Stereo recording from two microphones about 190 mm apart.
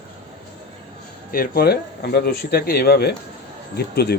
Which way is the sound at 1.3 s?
50° left (ahead or behind).